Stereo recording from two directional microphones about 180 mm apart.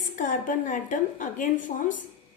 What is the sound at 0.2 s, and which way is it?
A woman's voice, 45° left (ahead or behind).